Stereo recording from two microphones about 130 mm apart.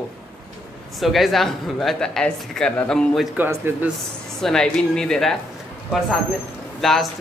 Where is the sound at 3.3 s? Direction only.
15° right (ahead or behind).